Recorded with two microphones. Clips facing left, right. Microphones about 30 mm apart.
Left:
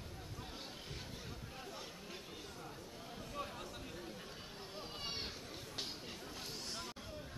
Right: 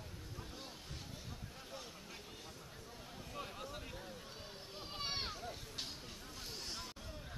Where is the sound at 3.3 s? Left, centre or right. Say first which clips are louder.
Even; centre.